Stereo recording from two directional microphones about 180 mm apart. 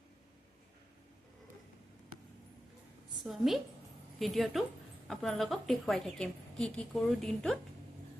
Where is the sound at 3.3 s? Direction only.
Centre (ahead or behind).